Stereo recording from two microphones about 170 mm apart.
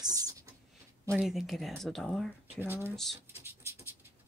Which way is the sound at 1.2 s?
Centre (ahead or behind).